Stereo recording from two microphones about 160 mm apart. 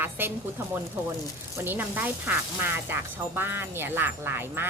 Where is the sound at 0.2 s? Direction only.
15° right (ahead or behind).